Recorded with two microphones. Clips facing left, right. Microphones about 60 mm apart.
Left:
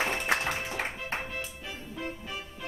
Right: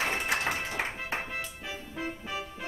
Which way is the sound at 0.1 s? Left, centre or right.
Centre.